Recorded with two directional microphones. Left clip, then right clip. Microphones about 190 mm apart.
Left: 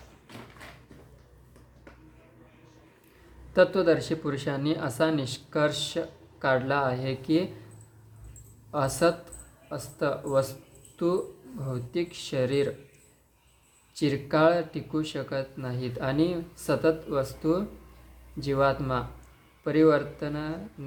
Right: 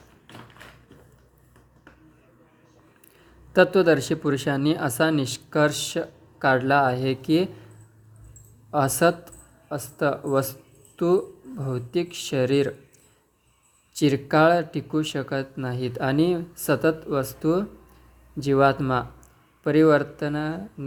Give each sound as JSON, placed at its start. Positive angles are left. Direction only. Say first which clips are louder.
{"t": 3.5, "sound": "speech", "louder": "right 4 dB", "side_deg": -40}
{"t": 8.7, "sound": "speech", "louder": "right 4 dB", "side_deg": -40}
{"t": 13.9, "sound": "speech", "louder": "right 6 dB", "side_deg": -40}